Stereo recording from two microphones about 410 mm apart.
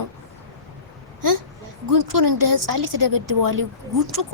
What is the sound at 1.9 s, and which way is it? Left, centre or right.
Speech, right.